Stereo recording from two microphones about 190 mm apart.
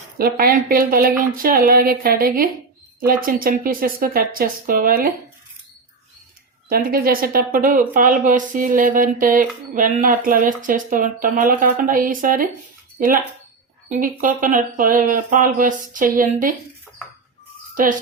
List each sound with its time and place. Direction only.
0.2 s speech: 50° right (ahead or behind)
6.7 s speech: 50° right (ahead or behind)
13.9 s speech: 45° right (ahead or behind)
17.8 s speech: 45° right (ahead or behind)